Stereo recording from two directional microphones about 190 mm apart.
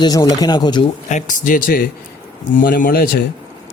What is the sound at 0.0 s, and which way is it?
Speech, 20° left (ahead or behind).